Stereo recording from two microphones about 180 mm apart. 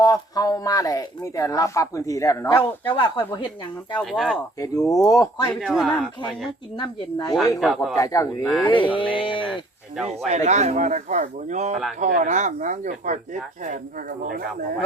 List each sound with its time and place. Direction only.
0.0 s speech: 20° left (ahead or behind)
2.9 s speech: 30° left (ahead or behind)
4.0 s speech: centre (ahead or behind)
5.0 s speech: 20° left (ahead or behind)
5.5 s speech: centre (ahead or behind)
6.7 s speech: 25° left (ahead or behind)
7.6 s speech: centre (ahead or behind)
7.9 s speech: 20° left (ahead or behind)
8.6 s speech: 30° left (ahead or behind)
10.0 s speech: 35° right (ahead or behind)